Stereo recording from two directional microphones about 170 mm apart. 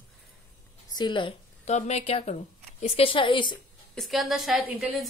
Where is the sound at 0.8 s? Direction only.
25° left (ahead or behind).